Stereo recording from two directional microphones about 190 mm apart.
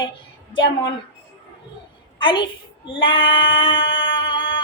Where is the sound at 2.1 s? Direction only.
25° left (ahead or behind).